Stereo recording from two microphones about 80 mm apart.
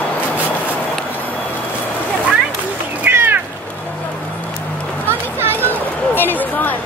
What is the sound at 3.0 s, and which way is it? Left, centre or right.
Cat, right.